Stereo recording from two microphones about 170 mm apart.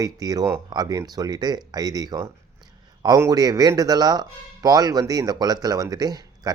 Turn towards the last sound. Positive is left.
turn(degrees=-25)  # may be behind; listen again after turning